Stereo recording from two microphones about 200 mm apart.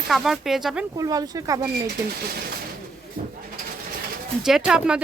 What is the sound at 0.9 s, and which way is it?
Speech, 20° right (ahead or behind).